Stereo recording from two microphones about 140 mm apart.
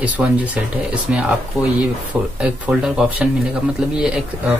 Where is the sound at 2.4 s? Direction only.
10° right (ahead or behind).